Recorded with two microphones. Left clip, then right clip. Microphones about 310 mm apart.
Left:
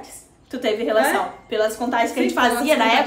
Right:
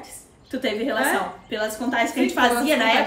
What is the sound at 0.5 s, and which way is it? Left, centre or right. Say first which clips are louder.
A woman's voice: left 3 dB; centre.